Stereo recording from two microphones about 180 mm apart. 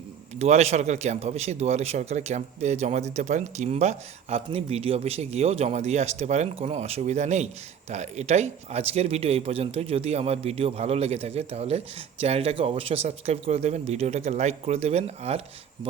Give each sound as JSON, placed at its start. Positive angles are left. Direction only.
{"t": 0.3, "sound": "speech", "side_deg": -40}